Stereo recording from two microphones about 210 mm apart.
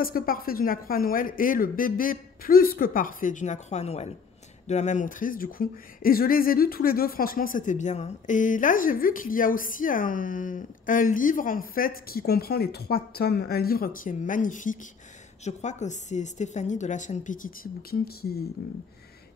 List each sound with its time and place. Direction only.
0.0 s speech: 45° left (ahead or behind)